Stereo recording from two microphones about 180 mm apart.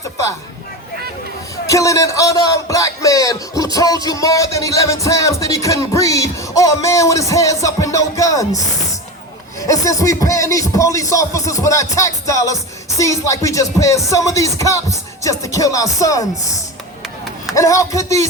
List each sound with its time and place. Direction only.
1.6 s speech: 15° left (ahead or behind)
17.5 s speech: 15° left (ahead or behind)